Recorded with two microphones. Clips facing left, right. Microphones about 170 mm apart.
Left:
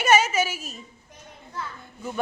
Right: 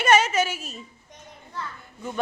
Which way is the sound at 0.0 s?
5° left (ahead or behind).